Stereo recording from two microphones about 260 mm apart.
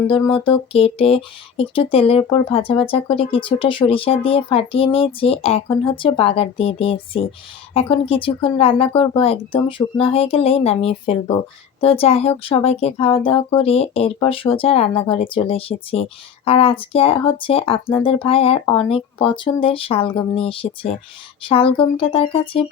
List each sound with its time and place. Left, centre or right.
0.1 s speech: centre